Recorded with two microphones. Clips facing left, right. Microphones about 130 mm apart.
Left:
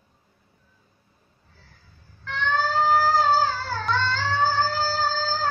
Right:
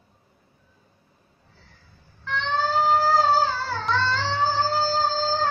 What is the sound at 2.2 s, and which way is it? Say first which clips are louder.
Music: even; 30° right (ahead or behind).